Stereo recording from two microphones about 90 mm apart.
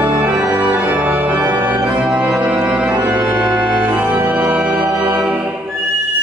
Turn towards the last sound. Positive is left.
turn(degrees=-20)  # may be behind; listen again after turning